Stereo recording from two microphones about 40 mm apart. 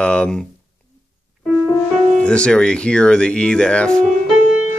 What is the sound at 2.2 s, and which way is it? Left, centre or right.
Speech, left.